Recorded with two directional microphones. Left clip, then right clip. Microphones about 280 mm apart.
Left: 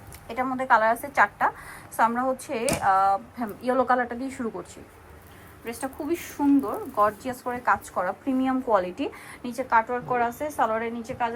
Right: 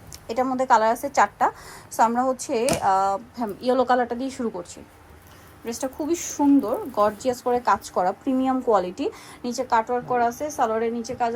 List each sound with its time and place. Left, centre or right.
0.3 s a woman's voice: centre
6.3 s a woman's voice: centre